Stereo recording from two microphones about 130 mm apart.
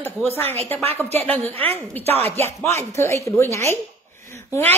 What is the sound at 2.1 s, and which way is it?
Chopping, 50° right (ahead or behind).